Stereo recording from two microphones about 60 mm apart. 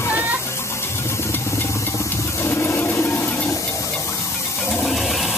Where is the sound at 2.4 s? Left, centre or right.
Left.